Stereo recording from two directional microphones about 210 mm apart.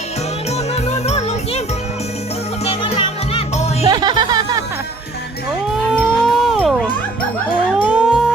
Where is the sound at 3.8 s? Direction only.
20° right (ahead or behind).